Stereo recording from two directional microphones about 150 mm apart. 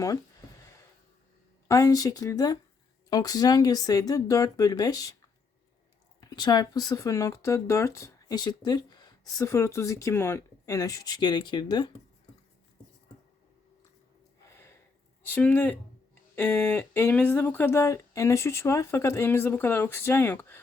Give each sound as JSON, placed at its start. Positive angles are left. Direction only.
{"t": 1.6, "sound": "speech", "side_deg": 20}
{"t": 6.1, "sound": "speech", "side_deg": 25}
{"t": 14.5, "sound": "a sound", "side_deg": 15}
{"t": 15.4, "sound": "speech", "side_deg": 10}